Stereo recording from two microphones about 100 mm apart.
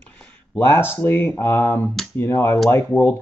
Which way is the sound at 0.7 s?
25° left (ahead or behind).